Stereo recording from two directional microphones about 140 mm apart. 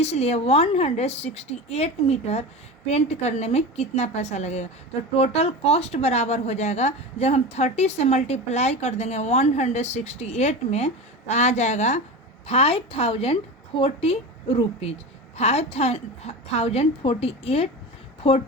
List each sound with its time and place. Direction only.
0.0 s speech: 50° left (ahead or behind)
12.5 s a woman's voice: 45° left (ahead or behind)